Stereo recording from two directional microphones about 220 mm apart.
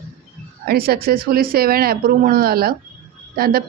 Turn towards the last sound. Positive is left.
turn(degrees=-45)  # may be behind; listen again after turning